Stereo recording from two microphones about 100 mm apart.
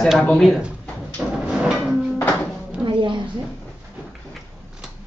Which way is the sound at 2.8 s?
55° right (ahead or behind).